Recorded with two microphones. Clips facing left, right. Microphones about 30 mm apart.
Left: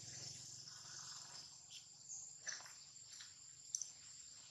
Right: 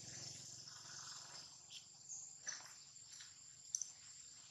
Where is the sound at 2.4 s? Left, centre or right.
Centre.